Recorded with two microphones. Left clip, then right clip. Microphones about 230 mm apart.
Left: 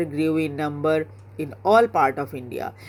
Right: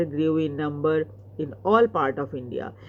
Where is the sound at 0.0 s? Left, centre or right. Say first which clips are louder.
Left 1 dB; left.